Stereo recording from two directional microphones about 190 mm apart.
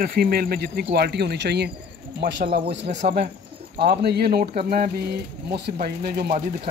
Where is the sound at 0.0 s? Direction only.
55° right (ahead or behind).